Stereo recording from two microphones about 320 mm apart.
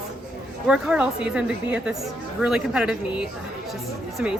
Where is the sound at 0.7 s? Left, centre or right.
Centre.